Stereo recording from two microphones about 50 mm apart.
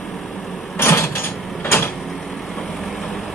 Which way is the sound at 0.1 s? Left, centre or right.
Centre.